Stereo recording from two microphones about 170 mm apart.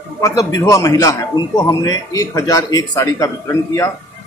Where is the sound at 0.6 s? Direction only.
20° left (ahead or behind).